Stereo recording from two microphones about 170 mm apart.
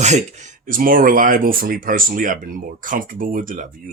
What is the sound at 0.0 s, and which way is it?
Speech, 45° right (ahead or behind).